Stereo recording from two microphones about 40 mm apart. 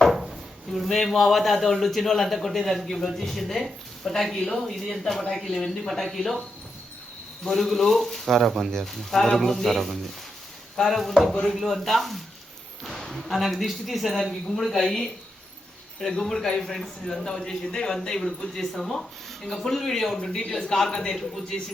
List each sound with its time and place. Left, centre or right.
0.1 s a woman's voice: centre
7.4 s a woman's voice: centre
8.4 s speech: centre
8.7 s a woman's voice: centre